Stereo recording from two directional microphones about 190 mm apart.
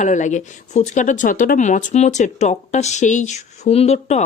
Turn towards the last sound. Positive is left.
turn(degrees=35)  # may be behind; listen again after turning